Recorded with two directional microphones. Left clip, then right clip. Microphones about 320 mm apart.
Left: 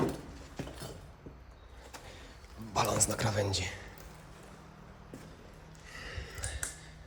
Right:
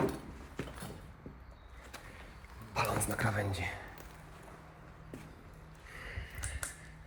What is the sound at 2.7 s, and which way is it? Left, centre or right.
Speech, centre.